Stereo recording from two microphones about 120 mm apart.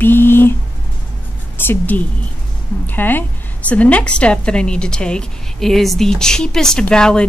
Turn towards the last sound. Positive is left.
turn(degrees=5)  # may be behind; listen again after turning